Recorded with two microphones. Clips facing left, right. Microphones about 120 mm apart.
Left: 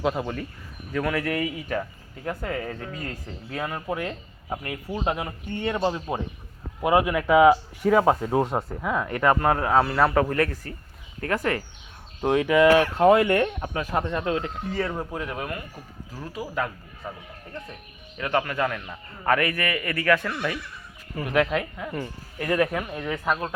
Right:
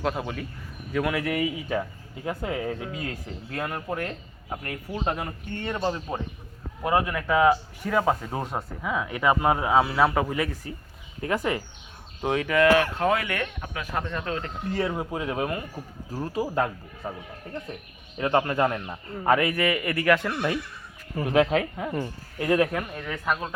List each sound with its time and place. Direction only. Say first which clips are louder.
0.0 s speech: left 2 dB; centre (ahead or behind)
0.9 s a man's voice: even; 10° right (ahead or behind); by 8.4 s 10° left (ahead or behind)
8.8 s a man's voice: left 1 dB; centre (ahead or behind)
12.2 s speech: left 4 dB; 5° left (ahead or behind)
12.6 s speech: left 4 dB; 20° left (ahead or behind)
13.9 s speech: left 4 dB; 20° left (ahead or behind)
14.7 s a man's voice: right 2 dB; 5° right (ahead or behind)
16.1 s speech: right 4 dB; 30° right (ahead or behind)
21.5 s speech: right 2 dB; 30° right (ahead or behind)
22.0 s a man's voice: right 2 dB; 15° right (ahead or behind)
22.7 s speech: left 2 dB; 5° left (ahead or behind)